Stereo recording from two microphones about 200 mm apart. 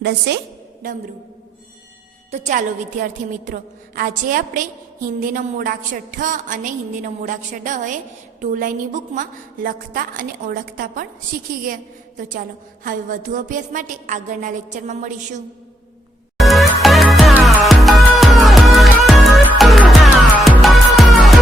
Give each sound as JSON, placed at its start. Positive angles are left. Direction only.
{"t": 0.0, "sound": "a woman's voice", "side_deg": -55}
{"t": 2.3, "sound": "a woman's voice", "side_deg": -40}
{"t": 16.4, "sound": "music", "side_deg": 0}